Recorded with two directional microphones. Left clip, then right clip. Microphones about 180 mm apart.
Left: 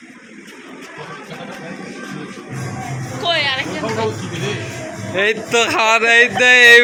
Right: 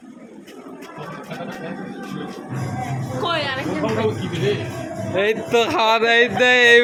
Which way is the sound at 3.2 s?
50° right (ahead or behind).